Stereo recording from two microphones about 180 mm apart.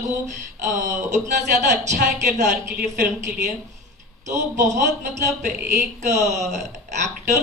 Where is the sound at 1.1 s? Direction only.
40° right (ahead or behind).